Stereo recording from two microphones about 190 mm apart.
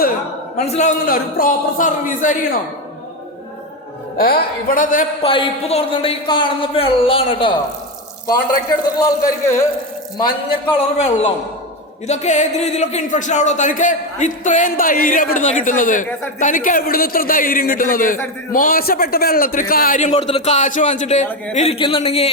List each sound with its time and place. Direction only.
0.5 s a man's voice: 35° left (ahead or behind)
4.2 s a man's voice: 55° left (ahead or behind)
5.2 s speech: 30° left (ahead or behind)
9.0 s speech: 20° left (ahead or behind)
10.9 s a man's voice: 35° left (ahead or behind)